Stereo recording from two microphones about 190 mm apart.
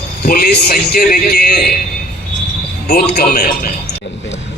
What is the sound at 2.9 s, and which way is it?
Speech, 55° left (ahead or behind).